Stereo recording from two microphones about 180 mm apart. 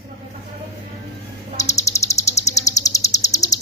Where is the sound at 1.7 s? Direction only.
15° left (ahead or behind).